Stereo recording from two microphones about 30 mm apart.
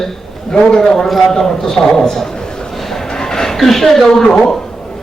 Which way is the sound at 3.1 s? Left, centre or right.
Centre.